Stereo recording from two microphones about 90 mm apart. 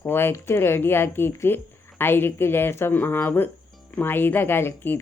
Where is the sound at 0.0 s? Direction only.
25° left (ahead or behind).